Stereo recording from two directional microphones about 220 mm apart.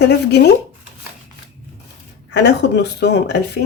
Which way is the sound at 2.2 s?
50° left (ahead or behind).